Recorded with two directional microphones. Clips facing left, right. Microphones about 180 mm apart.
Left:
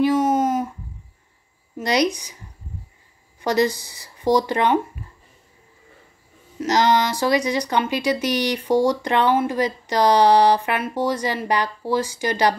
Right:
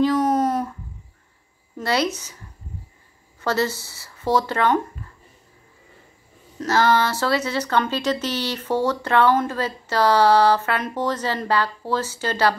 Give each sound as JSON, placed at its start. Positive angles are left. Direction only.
{"t": 0.0, "sound": "a sound", "side_deg": 10}
{"t": 1.8, "sound": "speech", "side_deg": 15}
{"t": 3.3, "sound": "speech", "side_deg": 15}
{"t": 6.6, "sound": "speech", "side_deg": 15}